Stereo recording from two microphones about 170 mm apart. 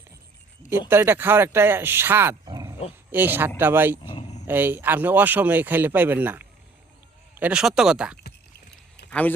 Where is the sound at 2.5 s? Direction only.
25° right (ahead or behind).